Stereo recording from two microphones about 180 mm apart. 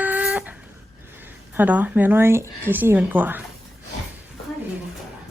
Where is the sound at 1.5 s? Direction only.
10° right (ahead or behind).